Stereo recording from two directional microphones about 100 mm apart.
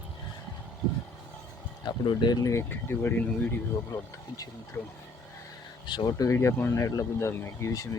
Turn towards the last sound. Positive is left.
turn(degrees=30)  # may be behind; listen again after turning